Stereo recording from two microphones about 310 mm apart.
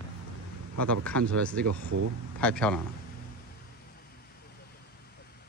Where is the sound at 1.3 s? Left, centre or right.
Centre.